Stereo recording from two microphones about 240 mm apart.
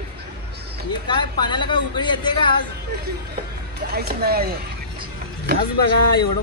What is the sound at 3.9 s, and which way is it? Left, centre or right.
Speech, right.